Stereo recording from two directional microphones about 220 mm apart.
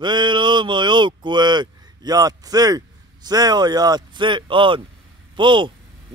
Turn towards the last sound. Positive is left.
turn(degrees=-20)  # may be behind; listen again after turning